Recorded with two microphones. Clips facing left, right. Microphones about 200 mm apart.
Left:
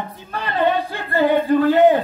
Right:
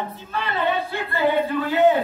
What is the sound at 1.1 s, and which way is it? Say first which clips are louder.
Music: left 5 dB; 45° left (ahead or behind).